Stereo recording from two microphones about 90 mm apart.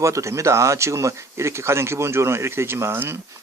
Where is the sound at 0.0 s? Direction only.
35° right (ahead or behind).